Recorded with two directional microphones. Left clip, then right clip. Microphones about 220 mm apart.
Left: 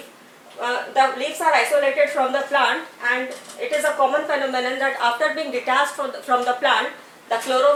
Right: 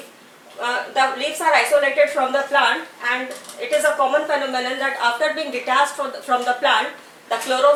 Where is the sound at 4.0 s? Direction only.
25° left (ahead or behind).